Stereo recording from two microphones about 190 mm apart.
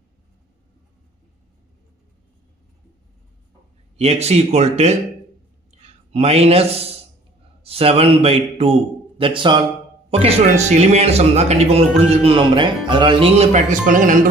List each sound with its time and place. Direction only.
3.9 s a man's voice: 35° right (ahead or behind)